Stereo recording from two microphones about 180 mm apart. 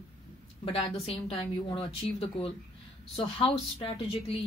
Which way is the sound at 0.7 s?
30° left (ahead or behind).